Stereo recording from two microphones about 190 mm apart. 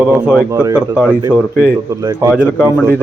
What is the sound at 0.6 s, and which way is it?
Speech, 20° right (ahead or behind).